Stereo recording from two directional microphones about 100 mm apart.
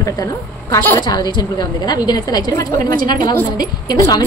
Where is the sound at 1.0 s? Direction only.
45° left (ahead or behind).